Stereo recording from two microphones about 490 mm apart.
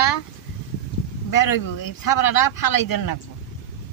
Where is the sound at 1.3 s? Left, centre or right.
Left.